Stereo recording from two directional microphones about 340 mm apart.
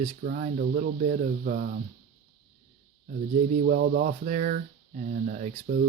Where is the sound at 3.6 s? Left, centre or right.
Right.